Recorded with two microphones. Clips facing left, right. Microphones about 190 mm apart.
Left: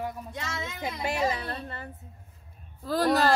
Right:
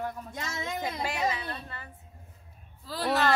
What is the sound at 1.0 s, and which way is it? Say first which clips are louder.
A woman's voice: left 5 dB; 30° left (ahead or behind).